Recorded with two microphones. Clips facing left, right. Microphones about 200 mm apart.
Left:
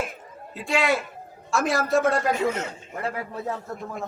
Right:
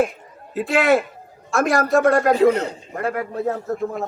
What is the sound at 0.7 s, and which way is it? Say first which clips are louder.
Speech: right 6 dB; 55° right (ahead or behind).